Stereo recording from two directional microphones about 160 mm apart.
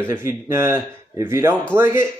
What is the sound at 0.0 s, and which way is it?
Speech, 15° right (ahead or behind).